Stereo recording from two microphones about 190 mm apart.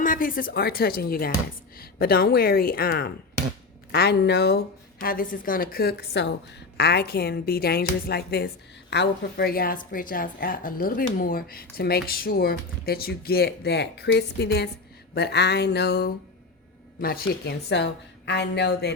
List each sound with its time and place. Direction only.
0.0 s a woman's voice: 45° left (ahead or behind); by 18.9 s 60° left (ahead or behind)